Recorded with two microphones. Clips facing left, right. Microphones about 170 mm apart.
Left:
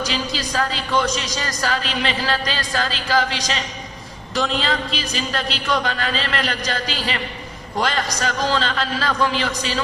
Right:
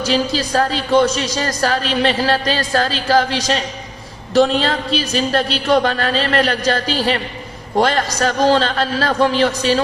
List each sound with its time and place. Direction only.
0.1 s a woman's voice: 40° right (ahead or behind)
4.4 s speech: 40° right (ahead or behind)